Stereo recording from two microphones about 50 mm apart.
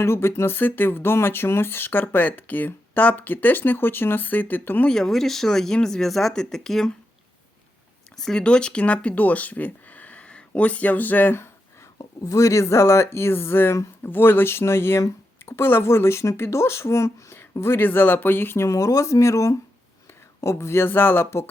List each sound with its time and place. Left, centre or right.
0.0 s speech: left
4.9 s speech: centre
8.1 s speech: centre; by 11.3 s left
12.4 s speech: left
18.6 s speech: left
20.4 s speech: left